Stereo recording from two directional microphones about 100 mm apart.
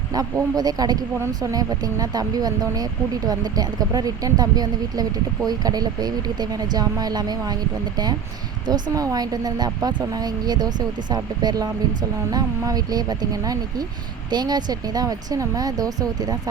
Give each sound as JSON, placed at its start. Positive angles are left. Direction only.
{"t": 0.1, "sound": "speech", "side_deg": -40}